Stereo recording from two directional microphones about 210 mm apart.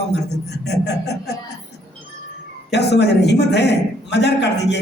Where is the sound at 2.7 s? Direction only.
55° left (ahead or behind).